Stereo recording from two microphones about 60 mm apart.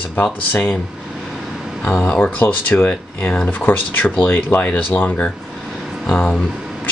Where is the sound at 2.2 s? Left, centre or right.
Left.